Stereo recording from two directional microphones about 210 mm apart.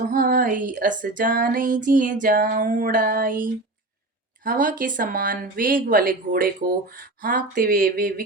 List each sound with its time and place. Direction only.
0.1 s speech: 40° right (ahead or behind)